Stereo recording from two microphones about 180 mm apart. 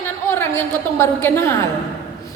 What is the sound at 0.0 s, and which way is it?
A woman's voice, 15° left (ahead or behind).